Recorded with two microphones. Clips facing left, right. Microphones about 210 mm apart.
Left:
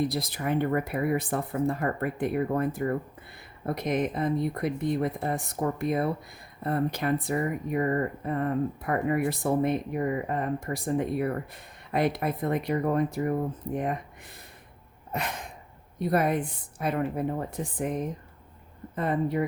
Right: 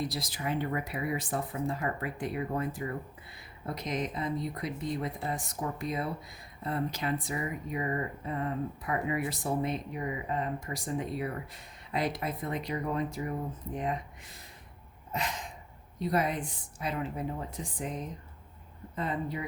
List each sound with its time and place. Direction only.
0.0 s speech: 55° left (ahead or behind)
15.1 s a sound: 60° left (ahead or behind)
16.0 s speech: 55° left (ahead or behind)